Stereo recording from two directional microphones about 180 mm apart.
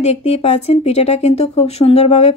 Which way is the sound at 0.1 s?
35° left (ahead or behind).